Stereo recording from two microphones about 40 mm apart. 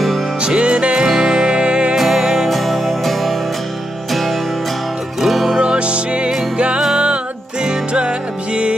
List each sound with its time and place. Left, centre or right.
0.4 s music: right
1.0 s music: centre
2.0 s music: centre
2.2 s music: centre
2.5 s music: centre
5.5 s music: right